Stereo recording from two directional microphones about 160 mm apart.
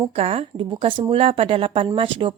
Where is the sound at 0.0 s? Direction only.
40° right (ahead or behind).